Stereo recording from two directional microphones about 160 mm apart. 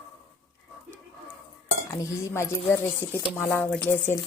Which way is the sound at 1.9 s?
20° left (ahead or behind).